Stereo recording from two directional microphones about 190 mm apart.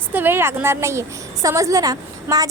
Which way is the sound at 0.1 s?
10° right (ahead or behind).